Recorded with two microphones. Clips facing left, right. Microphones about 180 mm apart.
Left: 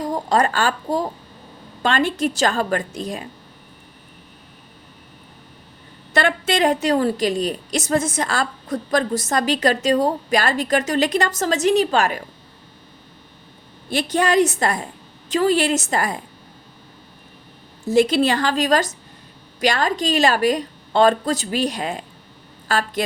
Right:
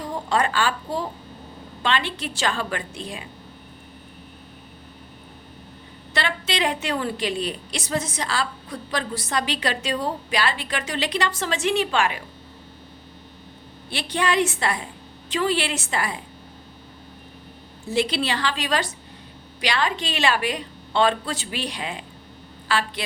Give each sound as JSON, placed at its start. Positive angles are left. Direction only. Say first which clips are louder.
{"t": 0.0, "sound": "a woman's voice", "louder": "left 4 dB", "side_deg": 40}
{"t": 6.1, "sound": "a woman's voice", "louder": "left 7 dB", "side_deg": 50}
{"t": 13.9, "sound": "a woman's voice", "louder": "left 6 dB", "side_deg": 45}
{"t": 17.8, "sound": "a woman's voice", "louder": "left 8 dB", "side_deg": 45}